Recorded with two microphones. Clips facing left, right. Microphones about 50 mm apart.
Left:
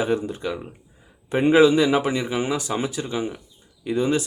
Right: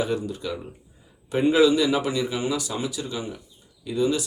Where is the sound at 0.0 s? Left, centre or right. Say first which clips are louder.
Left 3 dB; left.